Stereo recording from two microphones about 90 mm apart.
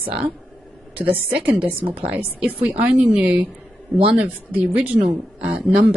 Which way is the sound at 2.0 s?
20° right (ahead or behind).